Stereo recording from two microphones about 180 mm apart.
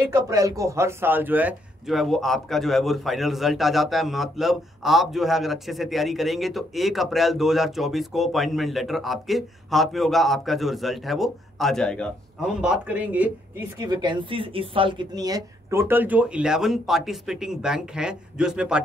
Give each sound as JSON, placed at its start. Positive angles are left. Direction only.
{"t": 0.1, "sound": "a man's voice", "side_deg": -20}
{"t": 12.6, "sound": "a man's voice", "side_deg": -10}
{"t": 13.8, "sound": "a man's voice", "side_deg": -25}